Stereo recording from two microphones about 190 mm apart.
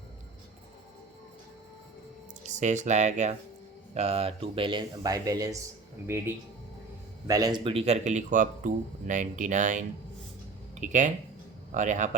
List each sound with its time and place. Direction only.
2.5 s speech: 40° right (ahead or behind); by 5.5 s 20° right (ahead or behind)
7.3 s speech: 20° right (ahead or behind); by 12.1 s 40° right (ahead or behind)